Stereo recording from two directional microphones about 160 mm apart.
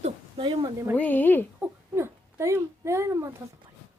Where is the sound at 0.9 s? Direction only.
10° left (ahead or behind).